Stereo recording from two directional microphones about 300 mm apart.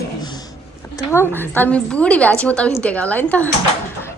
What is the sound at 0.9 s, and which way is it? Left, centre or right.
A woman's voice, centre.